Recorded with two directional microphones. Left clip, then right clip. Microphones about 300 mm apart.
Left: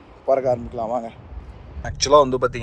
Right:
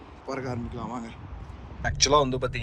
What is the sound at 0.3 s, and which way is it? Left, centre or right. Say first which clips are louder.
Speech: left 15 dB; centre.